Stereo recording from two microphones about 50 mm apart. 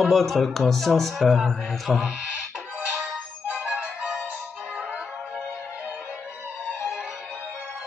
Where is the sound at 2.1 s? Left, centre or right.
Right.